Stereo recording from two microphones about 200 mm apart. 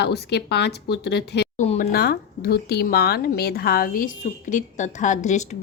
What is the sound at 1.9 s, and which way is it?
A woman's voice, 50° left (ahead or behind).